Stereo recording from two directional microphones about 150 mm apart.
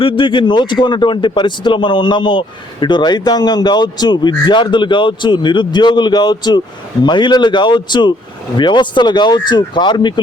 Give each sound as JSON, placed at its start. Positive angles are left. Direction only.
{"t": 0.0, "sound": "a man's voice", "side_deg": 35}